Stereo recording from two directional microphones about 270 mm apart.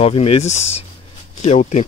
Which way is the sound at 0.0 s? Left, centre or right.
Left.